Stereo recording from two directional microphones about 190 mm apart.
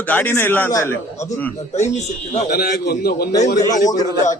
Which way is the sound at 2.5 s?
55° left (ahead or behind).